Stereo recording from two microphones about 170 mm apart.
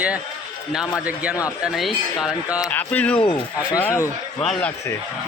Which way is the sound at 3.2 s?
30° left (ahead or behind).